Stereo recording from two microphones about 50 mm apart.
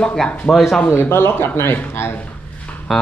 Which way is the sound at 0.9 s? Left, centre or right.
Left.